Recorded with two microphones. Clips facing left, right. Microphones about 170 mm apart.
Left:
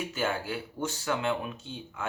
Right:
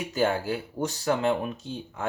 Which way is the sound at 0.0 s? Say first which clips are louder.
Right 6 dB; 40° right (ahead or behind).